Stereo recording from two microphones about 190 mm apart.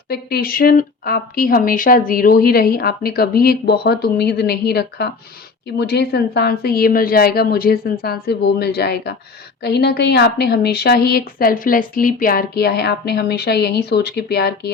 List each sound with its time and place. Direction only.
0.1 s speech: 55° left (ahead or behind)